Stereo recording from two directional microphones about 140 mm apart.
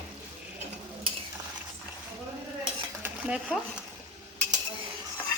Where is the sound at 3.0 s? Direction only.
10° right (ahead or behind).